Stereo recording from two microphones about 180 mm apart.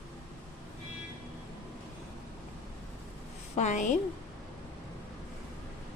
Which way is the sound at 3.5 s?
40° left (ahead or behind).